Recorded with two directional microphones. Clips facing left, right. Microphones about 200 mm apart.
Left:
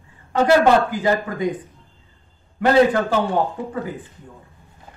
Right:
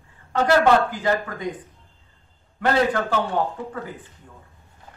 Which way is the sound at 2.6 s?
10° left (ahead or behind).